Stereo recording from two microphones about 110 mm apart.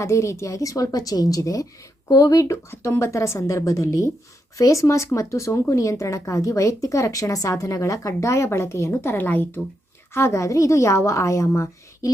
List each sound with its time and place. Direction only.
0.0 s a woman's voice: 25° left (ahead or behind)